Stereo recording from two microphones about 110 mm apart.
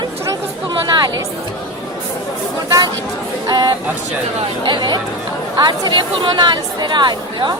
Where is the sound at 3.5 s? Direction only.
40° right (ahead or behind).